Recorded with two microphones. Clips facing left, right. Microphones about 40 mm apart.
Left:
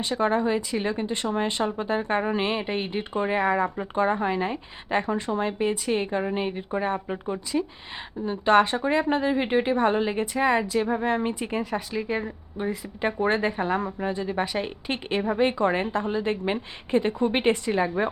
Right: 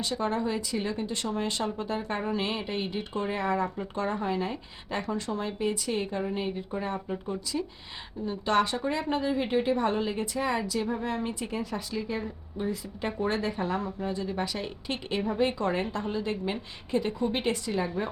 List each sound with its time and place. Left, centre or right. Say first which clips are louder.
0.0 s a woman's voice: left 5 dB; left